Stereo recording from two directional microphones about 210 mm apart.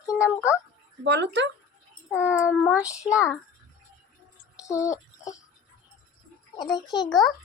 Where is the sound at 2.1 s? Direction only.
10° left (ahead or behind).